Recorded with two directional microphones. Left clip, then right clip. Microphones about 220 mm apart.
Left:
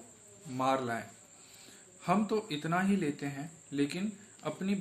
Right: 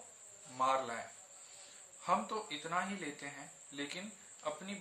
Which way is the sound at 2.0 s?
45° left (ahead or behind).